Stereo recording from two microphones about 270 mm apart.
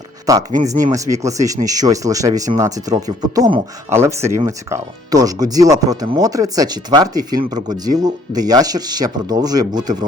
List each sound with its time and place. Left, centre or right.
0.5 s speech: right
0.9 s speech: centre